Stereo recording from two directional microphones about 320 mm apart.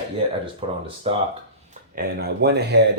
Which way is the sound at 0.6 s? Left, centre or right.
Centre.